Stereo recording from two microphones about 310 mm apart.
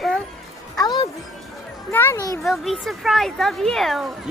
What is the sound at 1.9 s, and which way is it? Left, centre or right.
A child's voice, centre.